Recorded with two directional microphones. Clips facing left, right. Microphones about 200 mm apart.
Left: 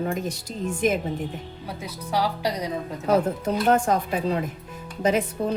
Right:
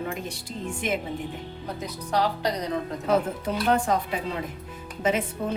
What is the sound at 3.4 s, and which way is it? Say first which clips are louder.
A woman's voice: left 3 dB; 45° left (ahead or behind).